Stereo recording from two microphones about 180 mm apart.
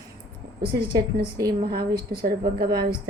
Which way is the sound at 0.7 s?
60° right (ahead or behind).